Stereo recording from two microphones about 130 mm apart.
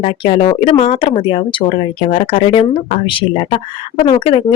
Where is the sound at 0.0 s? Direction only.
45° left (ahead or behind).